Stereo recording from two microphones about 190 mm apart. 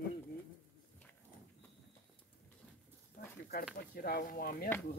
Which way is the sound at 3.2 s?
50° left (ahead or behind).